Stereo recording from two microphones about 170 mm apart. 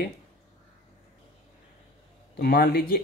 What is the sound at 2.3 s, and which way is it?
Speech, 60° left (ahead or behind).